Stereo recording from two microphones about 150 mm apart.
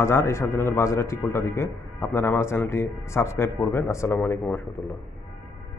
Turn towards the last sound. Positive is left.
turn(degrees=15)  # may be behind; listen again after turning